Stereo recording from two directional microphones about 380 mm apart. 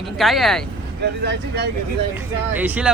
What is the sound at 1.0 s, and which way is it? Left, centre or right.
Speech, right.